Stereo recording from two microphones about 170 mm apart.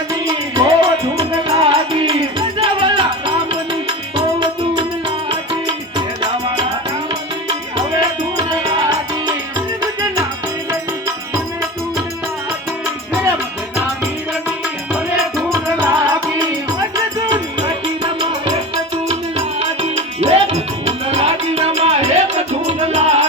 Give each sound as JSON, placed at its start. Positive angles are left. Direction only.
{"t": 0.3, "sound": "music", "side_deg": -25}
{"t": 8.4, "sound": "music", "side_deg": -25}
{"t": 15.5, "sound": "music", "side_deg": -15}
{"t": 17.6, "sound": "music", "side_deg": -25}
{"t": 19.5, "sound": "music", "side_deg": -35}